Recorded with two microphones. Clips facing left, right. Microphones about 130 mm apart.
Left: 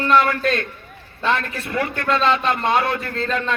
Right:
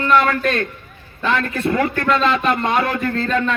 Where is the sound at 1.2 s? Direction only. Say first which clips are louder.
Right 1 dB; 30° left (ahead or behind).